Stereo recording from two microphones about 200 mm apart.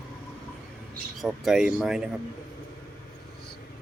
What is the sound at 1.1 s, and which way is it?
Speech, centre (ahead or behind).